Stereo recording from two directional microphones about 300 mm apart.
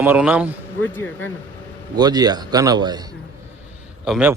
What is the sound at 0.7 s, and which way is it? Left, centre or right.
Speech, centre.